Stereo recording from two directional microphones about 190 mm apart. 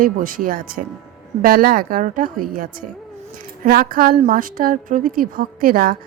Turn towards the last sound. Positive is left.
turn(degrees=-50)  # may be behind; listen again after turning